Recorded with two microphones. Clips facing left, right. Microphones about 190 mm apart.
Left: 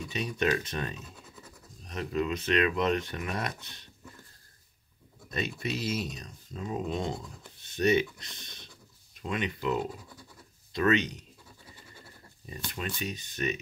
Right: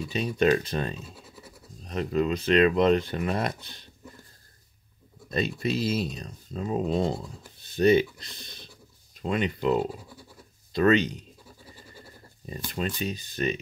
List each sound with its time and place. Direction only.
0.1 s speech: 35° right (ahead or behind)
5.3 s speech: 35° right (ahead or behind)
12.4 s speech: 35° right (ahead or behind)